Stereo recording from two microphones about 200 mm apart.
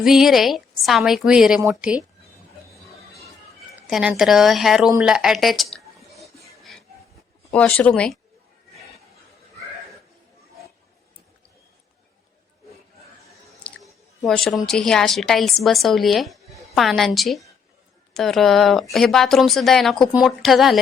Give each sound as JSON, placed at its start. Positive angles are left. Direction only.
{"t": 0.0, "sound": "a woman's voice", "side_deg": 0}
{"t": 3.8, "sound": "a woman's voice", "side_deg": -5}
{"t": 4.9, "sound": "a sound", "side_deg": -5}
{"t": 7.5, "sound": "a woman's voice", "side_deg": 5}
{"t": 13.7, "sound": "chewing", "side_deg": 5}
{"t": 14.3, "sound": "a woman's voice", "side_deg": 0}